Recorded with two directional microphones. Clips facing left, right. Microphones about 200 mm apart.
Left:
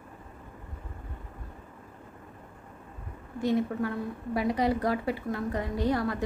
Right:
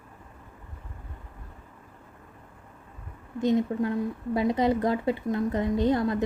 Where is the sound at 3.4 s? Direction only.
20° right (ahead or behind).